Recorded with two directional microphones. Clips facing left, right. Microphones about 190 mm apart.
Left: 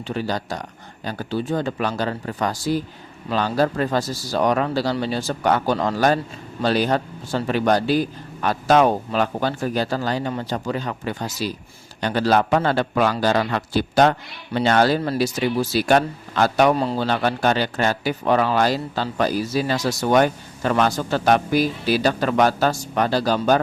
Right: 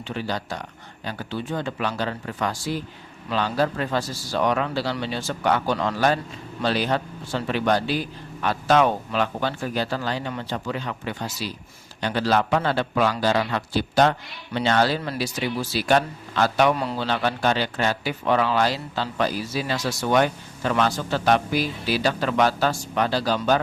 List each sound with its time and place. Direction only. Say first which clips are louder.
0.1 s a man's voice: left 3 dB; 40° left (ahead or behind)
16.7 s a man's voice: left 4 dB; 35° left (ahead or behind)